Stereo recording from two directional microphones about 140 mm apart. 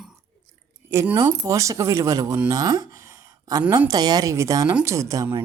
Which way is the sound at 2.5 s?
30° right (ahead or behind).